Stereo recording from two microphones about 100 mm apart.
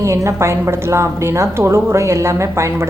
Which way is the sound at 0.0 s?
30° right (ahead or behind).